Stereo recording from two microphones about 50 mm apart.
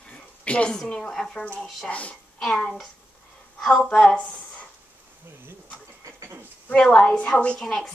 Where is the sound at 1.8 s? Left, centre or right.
Left.